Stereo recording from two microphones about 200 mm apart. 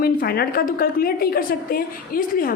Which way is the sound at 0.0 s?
50° left (ahead or behind).